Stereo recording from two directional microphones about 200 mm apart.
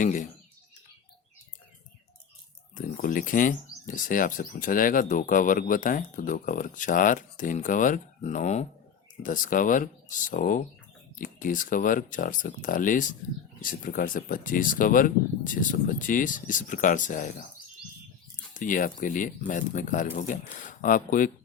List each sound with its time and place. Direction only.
0.0 s speech: 40° left (ahead or behind)
2.7 s speech: 40° left (ahead or behind)
18.5 s speech: 40° left (ahead or behind)